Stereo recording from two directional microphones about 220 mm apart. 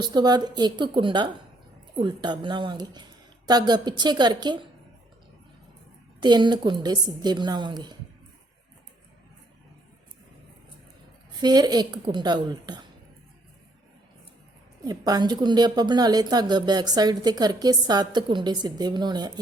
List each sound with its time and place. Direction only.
0.0 s a woman's voice: 20° right (ahead or behind)
6.1 s a woman's voice: 20° right (ahead or behind)
11.3 s a woman's voice: 20° right (ahead or behind)
14.8 s a woman's voice: 15° right (ahead or behind)